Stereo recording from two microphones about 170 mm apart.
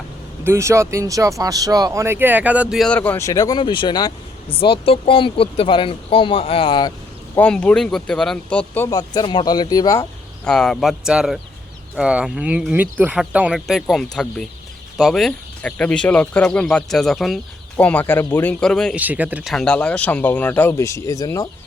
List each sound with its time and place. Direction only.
0.4 s speech: 15° right (ahead or behind); by 6.9 s 25° left (ahead or behind)
7.3 s speech: 5° left (ahead or behind)
8.9 s speech: 25° left (ahead or behind)
10.4 s speech: 5° left (ahead or behind)
18.9 s speech: 10° right (ahead or behind); by 21.5 s 20° left (ahead or behind)